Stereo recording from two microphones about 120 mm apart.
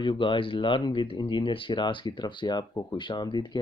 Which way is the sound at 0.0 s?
40° left (ahead or behind).